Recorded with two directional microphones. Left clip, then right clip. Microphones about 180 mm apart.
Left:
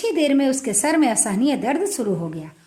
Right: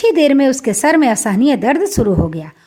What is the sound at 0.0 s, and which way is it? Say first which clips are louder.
A woman's voice: right 8 dB; 40° right (ahead or behind).